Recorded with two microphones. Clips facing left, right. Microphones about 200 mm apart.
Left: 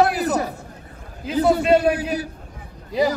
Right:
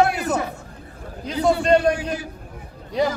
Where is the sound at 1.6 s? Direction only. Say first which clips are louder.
Left 1 dB; 5° left (ahead or behind).